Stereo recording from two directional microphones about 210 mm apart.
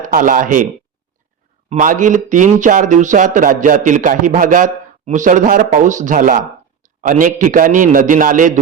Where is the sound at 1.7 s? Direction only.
35° right (ahead or behind).